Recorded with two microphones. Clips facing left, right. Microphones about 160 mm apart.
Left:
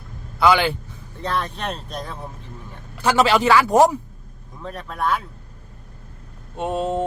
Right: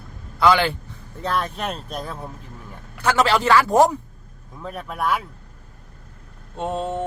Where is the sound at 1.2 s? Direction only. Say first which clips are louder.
Right 1 dB; 10° right (ahead or behind).